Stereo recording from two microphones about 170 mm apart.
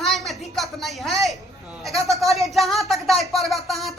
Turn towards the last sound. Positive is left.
turn(degrees=0)  # may be behind; listen again after turning